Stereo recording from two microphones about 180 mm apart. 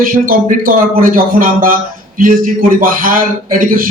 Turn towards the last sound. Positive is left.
turn(degrees=-50)  # may be behind; listen again after turning